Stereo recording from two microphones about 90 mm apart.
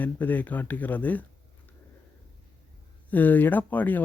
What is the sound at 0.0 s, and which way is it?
Speech, 20° left (ahead or behind).